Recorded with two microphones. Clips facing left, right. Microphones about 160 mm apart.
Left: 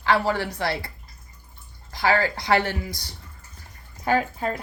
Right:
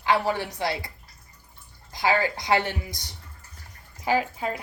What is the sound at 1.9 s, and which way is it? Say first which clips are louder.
A woman's voice: left 2 dB; 15° right (ahead or behind).